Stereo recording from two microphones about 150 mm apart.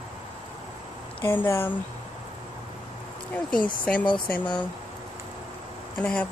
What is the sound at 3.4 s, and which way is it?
Speech, 5° left (ahead or behind).